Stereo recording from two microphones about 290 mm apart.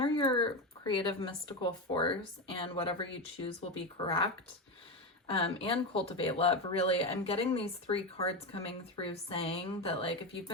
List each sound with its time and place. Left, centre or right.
0.0 s speech: centre
5.3 s speech: centre